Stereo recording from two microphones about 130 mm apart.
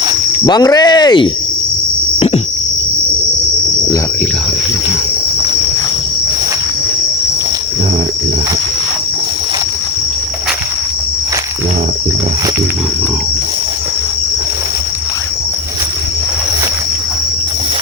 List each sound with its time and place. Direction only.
0.4 s speech: 30° left (ahead or behind)
2.1 s cricket: 50° left (ahead or behind)